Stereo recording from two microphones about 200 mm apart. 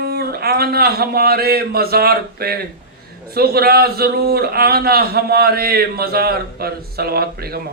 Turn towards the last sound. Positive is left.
turn(degrees=-50)  # may be behind; listen again after turning